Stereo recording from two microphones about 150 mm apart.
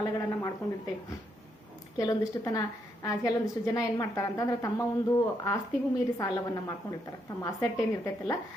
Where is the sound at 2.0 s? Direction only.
25° left (ahead or behind).